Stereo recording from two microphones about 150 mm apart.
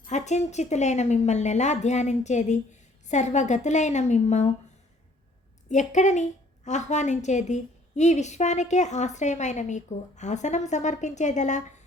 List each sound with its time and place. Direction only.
0.1 s a woman's voice: 50° left (ahead or behind)
5.6 s a woman's voice: 55° left (ahead or behind)